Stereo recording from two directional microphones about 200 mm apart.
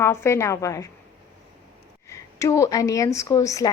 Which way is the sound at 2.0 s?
15° left (ahead or behind).